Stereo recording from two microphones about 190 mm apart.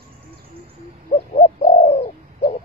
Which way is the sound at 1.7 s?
30° left (ahead or behind).